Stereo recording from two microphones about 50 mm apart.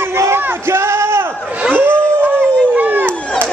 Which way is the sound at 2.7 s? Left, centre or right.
Right.